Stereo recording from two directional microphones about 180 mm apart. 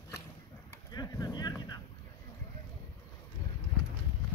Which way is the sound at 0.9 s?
20° left (ahead or behind).